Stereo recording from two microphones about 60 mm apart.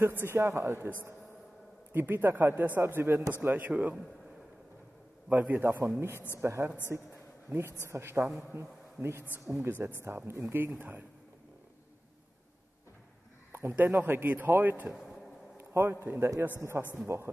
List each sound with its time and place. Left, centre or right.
0.2 s speech: right
1.9 s a man's voice: right
5.3 s a man's voice: right
6.9 s a man's voice: right
9.6 s speech: right
10.8 s a man's voice: right
13.5 s a man's voice: right
14.9 s a sound: centre
15.5 s a man's voice: right